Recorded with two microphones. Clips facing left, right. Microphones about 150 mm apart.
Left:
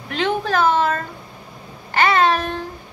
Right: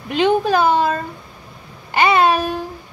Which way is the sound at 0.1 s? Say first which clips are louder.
Right 5 dB; 15° right (ahead or behind).